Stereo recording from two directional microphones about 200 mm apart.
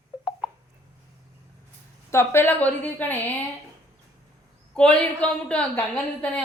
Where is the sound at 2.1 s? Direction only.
10° left (ahead or behind).